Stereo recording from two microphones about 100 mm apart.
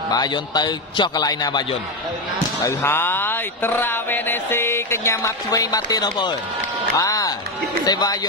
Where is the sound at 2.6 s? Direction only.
25° left (ahead or behind).